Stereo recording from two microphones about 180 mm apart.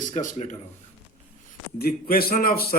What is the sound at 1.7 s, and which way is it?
A man's voice, 55° left (ahead or behind).